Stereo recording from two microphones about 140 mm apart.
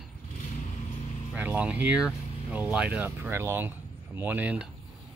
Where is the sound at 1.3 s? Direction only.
10° right (ahead or behind).